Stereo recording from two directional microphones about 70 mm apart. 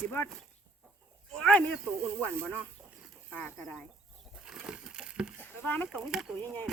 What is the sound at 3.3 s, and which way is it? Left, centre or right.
Speech, centre.